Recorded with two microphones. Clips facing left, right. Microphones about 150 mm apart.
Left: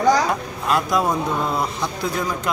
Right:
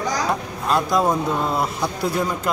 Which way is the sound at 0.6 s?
Centre (ahead or behind).